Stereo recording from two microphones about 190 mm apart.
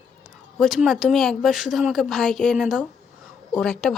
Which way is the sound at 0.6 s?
Centre (ahead or behind).